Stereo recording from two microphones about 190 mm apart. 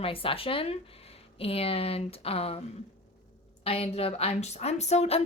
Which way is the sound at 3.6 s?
30° left (ahead or behind).